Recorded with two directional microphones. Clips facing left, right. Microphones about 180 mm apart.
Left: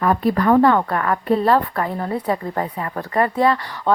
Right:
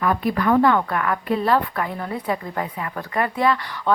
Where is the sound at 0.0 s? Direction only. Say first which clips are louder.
Left 3 dB; 35° left (ahead or behind).